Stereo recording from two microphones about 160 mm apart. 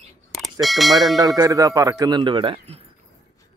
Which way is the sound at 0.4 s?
Centre (ahead or behind).